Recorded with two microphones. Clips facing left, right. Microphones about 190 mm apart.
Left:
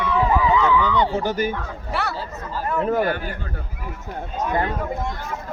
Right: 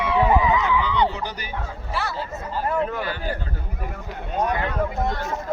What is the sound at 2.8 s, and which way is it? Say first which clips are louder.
Speech: left 5 dB; 45° left (ahead or behind).